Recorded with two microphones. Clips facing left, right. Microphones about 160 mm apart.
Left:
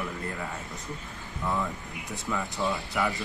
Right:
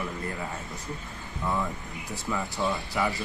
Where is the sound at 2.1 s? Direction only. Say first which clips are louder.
Right 1 dB; centre (ahead or behind).